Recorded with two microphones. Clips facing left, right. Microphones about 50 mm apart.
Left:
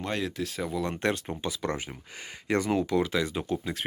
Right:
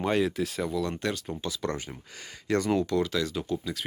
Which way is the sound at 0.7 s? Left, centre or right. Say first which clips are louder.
Left 1 dB; left.